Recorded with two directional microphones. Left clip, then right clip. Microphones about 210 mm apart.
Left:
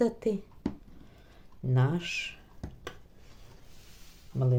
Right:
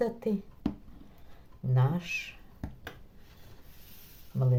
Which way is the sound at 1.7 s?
30° left (ahead or behind).